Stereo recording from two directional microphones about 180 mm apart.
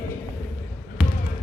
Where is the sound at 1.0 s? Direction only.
5° right (ahead or behind).